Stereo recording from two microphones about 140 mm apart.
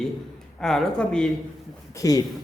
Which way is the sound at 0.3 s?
5° left (ahead or behind).